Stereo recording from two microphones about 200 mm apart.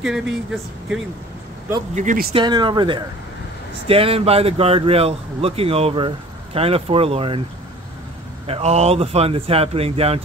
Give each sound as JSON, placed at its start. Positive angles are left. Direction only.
{"t": 0.0, "sound": "speech", "side_deg": -5}
{"t": 2.0, "sound": "speech", "side_deg": -45}
{"t": 2.3, "sound": "speech", "side_deg": -20}
{"t": 8.5, "sound": "speech", "side_deg": -30}